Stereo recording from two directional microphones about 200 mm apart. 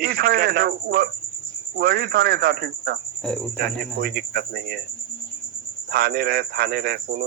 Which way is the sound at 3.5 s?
55° right (ahead or behind).